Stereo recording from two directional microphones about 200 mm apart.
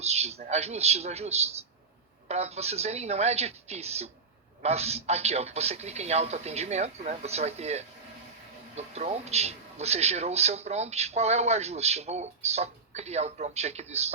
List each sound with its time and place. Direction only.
0.0 s speech: 30° right (ahead or behind)